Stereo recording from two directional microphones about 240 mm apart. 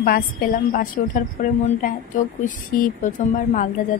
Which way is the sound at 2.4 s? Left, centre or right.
Left.